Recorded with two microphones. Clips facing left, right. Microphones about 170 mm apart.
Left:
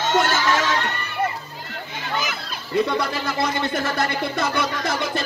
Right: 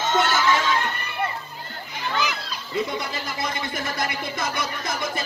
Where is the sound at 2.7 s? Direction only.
70° left (ahead or behind).